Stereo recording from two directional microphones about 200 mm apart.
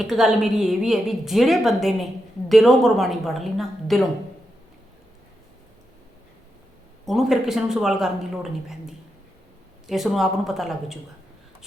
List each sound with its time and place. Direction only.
0.0 s a woman's voice: centre (ahead or behind)
7.0 s a woman's voice: centre (ahead or behind)
9.8 s a woman's voice: centre (ahead or behind)